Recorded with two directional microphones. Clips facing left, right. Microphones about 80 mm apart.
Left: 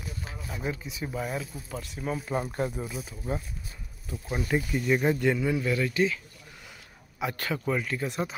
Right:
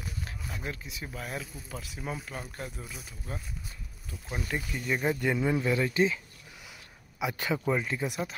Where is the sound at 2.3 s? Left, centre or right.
Left.